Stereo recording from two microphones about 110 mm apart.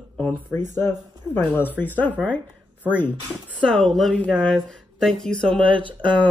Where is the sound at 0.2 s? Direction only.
20° left (ahead or behind).